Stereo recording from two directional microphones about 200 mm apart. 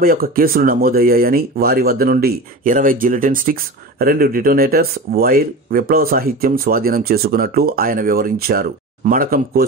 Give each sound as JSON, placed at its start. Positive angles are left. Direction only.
{"t": 0.0, "sound": "speech", "side_deg": -45}